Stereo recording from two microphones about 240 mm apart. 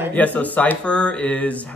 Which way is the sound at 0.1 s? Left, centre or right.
Centre.